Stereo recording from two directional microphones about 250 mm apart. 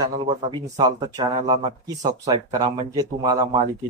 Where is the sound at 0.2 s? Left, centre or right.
Centre.